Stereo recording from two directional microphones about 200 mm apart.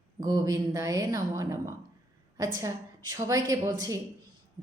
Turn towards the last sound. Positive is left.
turn(degrees=-15)  # may be behind; listen again after turning